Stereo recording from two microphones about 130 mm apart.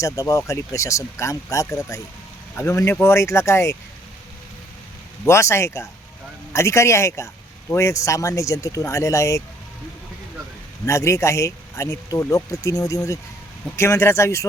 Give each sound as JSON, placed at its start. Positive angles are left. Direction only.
{"t": 0.0, "sound": "speech", "side_deg": 25}
{"t": 5.2, "sound": "speech", "side_deg": 20}
{"t": 10.8, "sound": "speech", "side_deg": 20}